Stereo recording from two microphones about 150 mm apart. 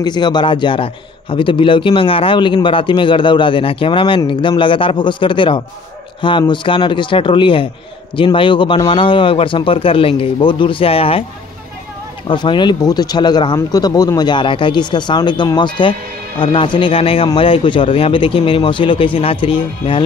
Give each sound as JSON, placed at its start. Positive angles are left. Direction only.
{"t": 0.0, "sound": "a man's voice", "side_deg": 30}
{"t": 12.3, "sound": "a man's voice", "side_deg": 30}